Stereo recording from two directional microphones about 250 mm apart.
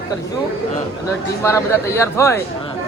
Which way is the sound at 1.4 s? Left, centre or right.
Centre.